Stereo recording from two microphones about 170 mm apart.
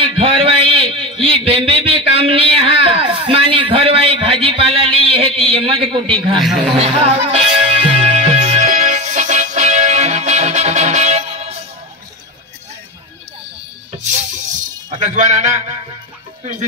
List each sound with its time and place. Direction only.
0.0 s a sound: 30° right (ahead or behind)
6.7 s music: 35° right (ahead or behind)
15.0 s a man's voice: 45° right (ahead or behind)